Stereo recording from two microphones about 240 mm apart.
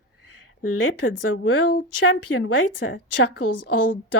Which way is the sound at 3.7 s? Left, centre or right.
Left.